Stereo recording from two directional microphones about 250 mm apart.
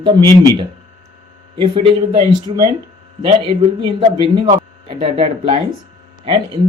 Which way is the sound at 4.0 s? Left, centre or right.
Centre.